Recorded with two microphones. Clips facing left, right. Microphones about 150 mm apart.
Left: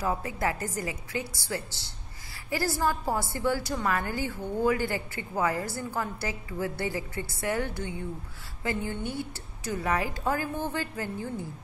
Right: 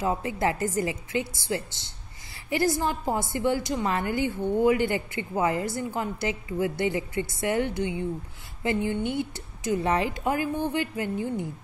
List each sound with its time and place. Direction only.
0.0 s a woman's voice: 20° right (ahead or behind)